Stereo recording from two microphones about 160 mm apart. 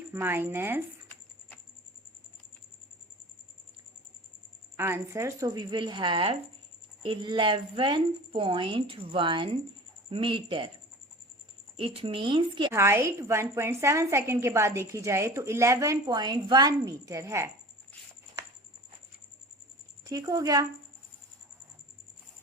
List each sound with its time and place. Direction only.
0.1 s a woman's voice: 15° right (ahead or behind)
4.8 s a woman's voice: 15° right (ahead or behind); by 10.7 s 30° right (ahead or behind)
11.8 s a woman's voice: 35° right (ahead or behind)
12.7 s a woman's voice: 15° right (ahead or behind)
20.1 s a woman's voice: 20° right (ahead or behind)